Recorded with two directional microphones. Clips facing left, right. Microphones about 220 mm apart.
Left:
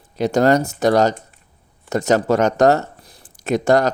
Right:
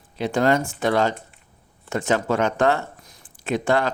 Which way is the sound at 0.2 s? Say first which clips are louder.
Left 5 dB; 40° left (ahead or behind).